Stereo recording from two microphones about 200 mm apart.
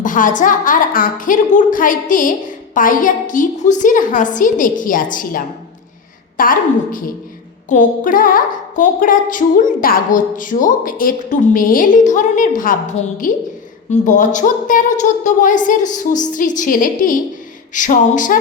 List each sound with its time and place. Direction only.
0.0 s a woman's voice: 40° left (ahead or behind)